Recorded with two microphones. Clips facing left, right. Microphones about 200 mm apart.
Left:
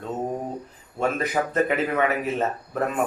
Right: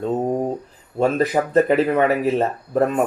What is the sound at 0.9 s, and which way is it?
Speech, 35° right (ahead or behind).